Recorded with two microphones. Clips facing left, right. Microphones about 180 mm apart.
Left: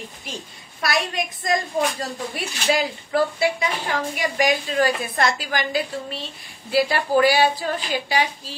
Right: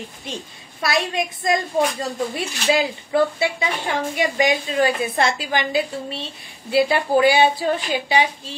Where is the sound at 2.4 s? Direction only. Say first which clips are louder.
Right 1 dB; 25° right (ahead or behind).